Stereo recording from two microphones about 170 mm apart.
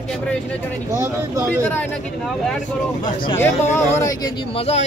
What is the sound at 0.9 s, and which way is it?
Speech, 15° right (ahead or behind).